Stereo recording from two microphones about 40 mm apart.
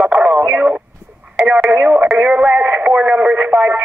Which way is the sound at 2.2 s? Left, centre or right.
Right.